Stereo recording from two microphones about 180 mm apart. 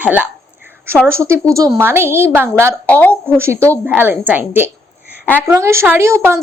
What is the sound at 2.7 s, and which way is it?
Speech, 10° left (ahead or behind).